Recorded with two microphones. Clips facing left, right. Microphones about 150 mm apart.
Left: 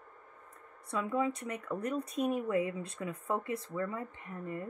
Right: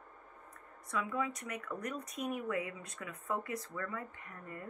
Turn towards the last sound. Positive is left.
turn(degrees=25)  # may be behind; listen again after turning